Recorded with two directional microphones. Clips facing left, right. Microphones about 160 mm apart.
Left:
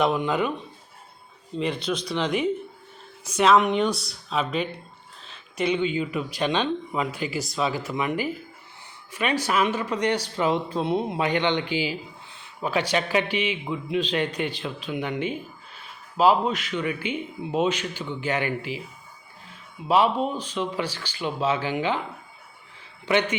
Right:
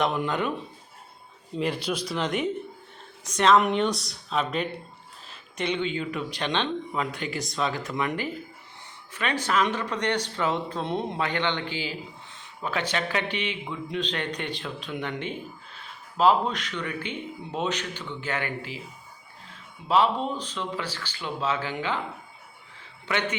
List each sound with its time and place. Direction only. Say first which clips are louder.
0.0 s speech: left 3 dB; centre (ahead or behind)
1.5 s speech: left 1 dB; 5° right (ahead or behind)
5.2 s a sound: left 5 dB; 5° right (ahead or behind)
5.6 s speech: left 4 dB; 5° left (ahead or behind)
19.9 s speech: left 2 dB; 10° left (ahead or behind)
23.0 s a man's voice: left 6 dB; 20° left (ahead or behind)